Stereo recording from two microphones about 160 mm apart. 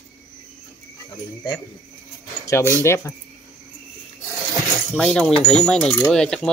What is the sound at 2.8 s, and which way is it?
Speech, 15° left (ahead or behind).